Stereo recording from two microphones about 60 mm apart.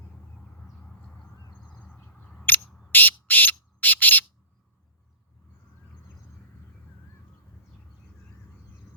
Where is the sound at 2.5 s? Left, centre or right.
Left.